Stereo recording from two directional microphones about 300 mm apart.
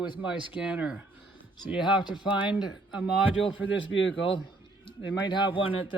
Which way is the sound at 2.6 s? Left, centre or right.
Centre.